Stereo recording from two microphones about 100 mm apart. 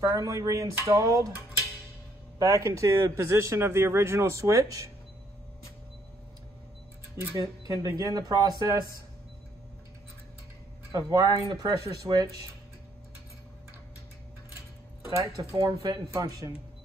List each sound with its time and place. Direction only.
0.0 s speech: 35° right (ahead or behind)
2.3 s speech: 35° right (ahead or behind)
7.2 s speech: 35° right (ahead or behind)
10.9 s speech: 35° right (ahead or behind)
15.0 s speech: 35° right (ahead or behind)